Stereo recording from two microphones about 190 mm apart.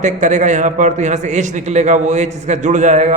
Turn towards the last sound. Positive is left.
turn(degrees=-40)  # may be behind; listen again after turning